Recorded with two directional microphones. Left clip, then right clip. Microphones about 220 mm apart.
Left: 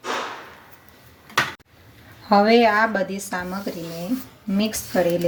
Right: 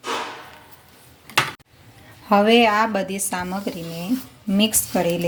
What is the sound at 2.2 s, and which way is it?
A woman's voice, 15° right (ahead or behind).